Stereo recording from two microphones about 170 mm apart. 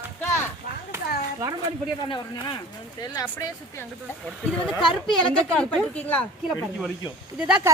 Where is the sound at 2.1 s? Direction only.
30° left (ahead or behind).